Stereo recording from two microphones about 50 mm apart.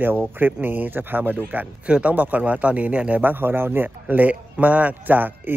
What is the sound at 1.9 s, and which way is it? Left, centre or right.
A man's voice, right.